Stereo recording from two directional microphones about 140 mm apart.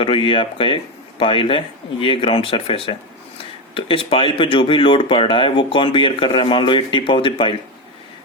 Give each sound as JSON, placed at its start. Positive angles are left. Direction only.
{"t": 0.0, "sound": "speech", "side_deg": 40}